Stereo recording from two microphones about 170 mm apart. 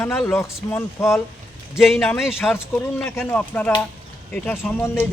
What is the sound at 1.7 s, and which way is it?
Speech, centre (ahead or behind).